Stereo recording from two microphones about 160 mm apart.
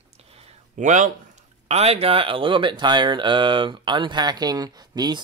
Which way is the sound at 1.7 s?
40° right (ahead or behind).